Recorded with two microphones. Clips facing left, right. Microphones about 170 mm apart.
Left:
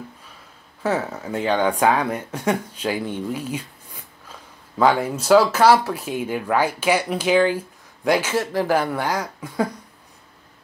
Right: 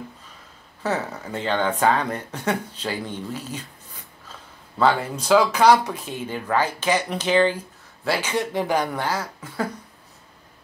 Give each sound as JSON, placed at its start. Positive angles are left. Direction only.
{"t": 0.8, "sound": "speech", "side_deg": 10}